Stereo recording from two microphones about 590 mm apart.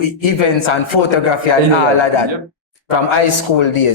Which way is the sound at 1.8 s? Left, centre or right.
Left.